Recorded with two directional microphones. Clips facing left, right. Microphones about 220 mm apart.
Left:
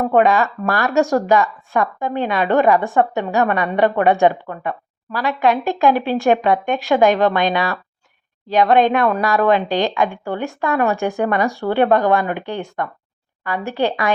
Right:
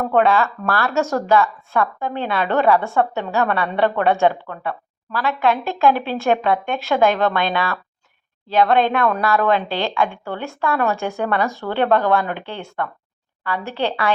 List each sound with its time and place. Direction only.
0.0 s speech: 15° left (ahead or behind)